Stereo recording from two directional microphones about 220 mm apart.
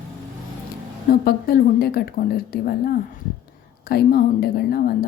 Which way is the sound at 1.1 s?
45° left (ahead or behind).